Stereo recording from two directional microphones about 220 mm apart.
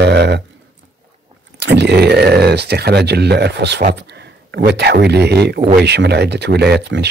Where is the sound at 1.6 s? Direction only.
50° right (ahead or behind).